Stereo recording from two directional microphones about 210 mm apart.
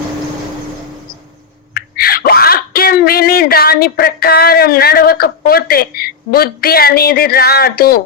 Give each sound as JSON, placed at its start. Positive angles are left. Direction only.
{"t": 1.7, "sound": "speech", "side_deg": 45}